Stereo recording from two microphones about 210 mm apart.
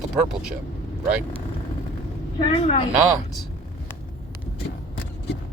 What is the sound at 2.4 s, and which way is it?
Speech, 25° left (ahead or behind).